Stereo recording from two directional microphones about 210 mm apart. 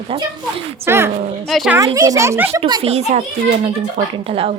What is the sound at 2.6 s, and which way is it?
Speech, 30° right (ahead or behind).